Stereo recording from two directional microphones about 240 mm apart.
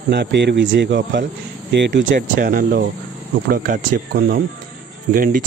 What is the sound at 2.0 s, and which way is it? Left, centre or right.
Speech, right.